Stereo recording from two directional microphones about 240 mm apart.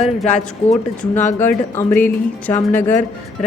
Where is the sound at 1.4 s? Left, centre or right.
Centre.